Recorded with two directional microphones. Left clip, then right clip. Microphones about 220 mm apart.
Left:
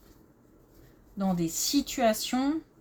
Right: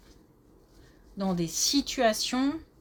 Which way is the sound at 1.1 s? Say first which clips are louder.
Even; 35° right (ahead or behind).